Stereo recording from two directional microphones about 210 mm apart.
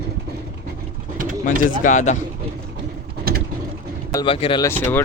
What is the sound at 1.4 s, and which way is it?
Speech, 40° left (ahead or behind).